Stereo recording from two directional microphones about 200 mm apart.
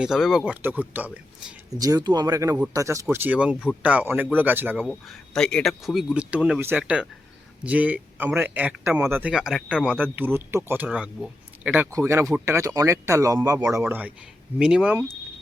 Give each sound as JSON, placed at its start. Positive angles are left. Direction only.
{"t": 0.0, "sound": "speech", "side_deg": -5}
{"t": 1.8, "sound": "speech", "side_deg": -20}
{"t": 4.9, "sound": "speech", "side_deg": 0}